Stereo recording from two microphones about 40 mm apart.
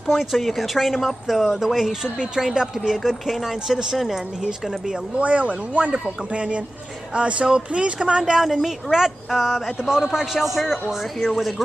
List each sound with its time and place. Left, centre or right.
0.0 s speech: centre
2.0 s speech: right; by 4.2 s centre
4.5 s speech: right
5.2 s speech: right
8.9 s speech: centre